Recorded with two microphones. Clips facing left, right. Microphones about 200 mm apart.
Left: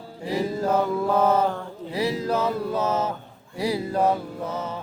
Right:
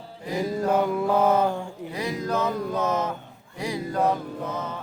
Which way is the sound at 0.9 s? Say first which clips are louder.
Even; 10° right (ahead or behind).